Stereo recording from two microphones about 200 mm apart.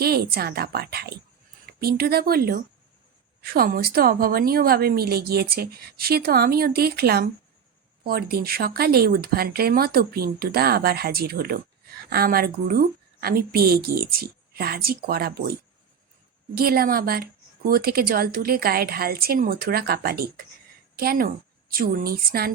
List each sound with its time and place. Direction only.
0.0 s a woman's voice: 50° right (ahead or behind)
16.6 s a woman's voice: 50° right (ahead or behind)